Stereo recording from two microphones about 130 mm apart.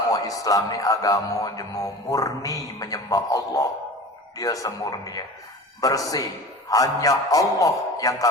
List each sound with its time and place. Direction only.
0.1 s speech: 25° left (ahead or behind)